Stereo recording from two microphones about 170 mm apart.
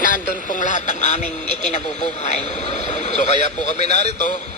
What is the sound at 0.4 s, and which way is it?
Speech, 50° left (ahead or behind).